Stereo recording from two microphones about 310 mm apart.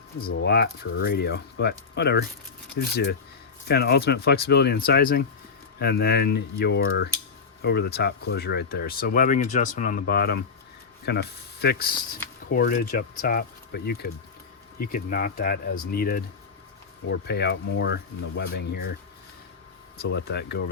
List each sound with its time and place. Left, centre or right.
0.3 s speech: left
20.0 s speech: left